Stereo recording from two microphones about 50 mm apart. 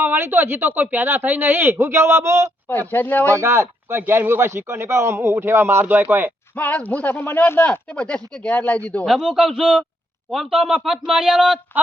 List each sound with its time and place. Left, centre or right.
0.0 s speech: right
1.8 s a man's voice: right
2.6 s speech: left
3.2 s a man's voice: right
5.8 s speech: right
6.6 s speech: left
7.9 s speech: left
9.0 s speech: centre